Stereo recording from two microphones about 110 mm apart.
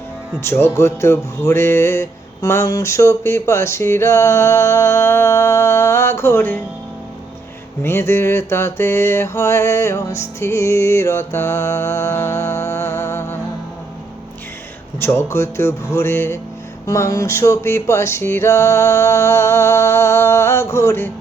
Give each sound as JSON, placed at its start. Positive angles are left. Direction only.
{"t": 0.3, "sound": "music", "side_deg": 20}
{"t": 7.8, "sound": "music", "side_deg": 20}
{"t": 14.9, "sound": "music", "side_deg": 20}